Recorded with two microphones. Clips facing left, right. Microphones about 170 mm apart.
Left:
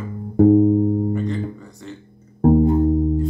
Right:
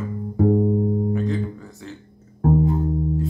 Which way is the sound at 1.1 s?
Centre (ahead or behind).